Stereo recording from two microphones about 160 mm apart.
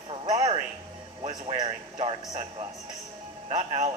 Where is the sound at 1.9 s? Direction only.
45° right (ahead or behind).